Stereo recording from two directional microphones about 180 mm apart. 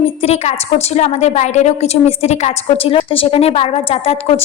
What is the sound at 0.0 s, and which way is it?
A woman's voice, 35° left (ahead or behind).